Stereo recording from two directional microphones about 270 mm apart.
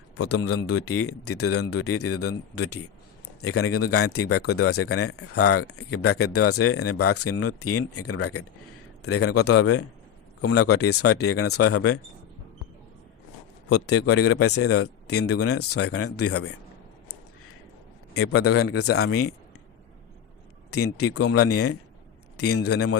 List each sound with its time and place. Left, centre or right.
0.2 s a man's voice: left
13.7 s speech: left
18.1 s a man's voice: left
20.7 s speech: left